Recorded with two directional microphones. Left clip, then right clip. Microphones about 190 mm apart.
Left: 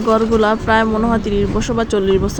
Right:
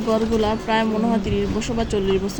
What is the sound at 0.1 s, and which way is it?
Speech, 20° left (ahead or behind).